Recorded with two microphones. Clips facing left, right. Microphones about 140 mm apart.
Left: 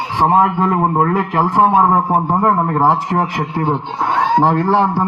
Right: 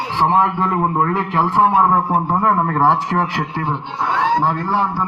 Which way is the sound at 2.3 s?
10° left (ahead or behind).